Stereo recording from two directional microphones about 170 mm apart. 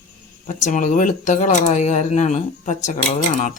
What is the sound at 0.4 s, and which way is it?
Speech, 45° left (ahead or behind).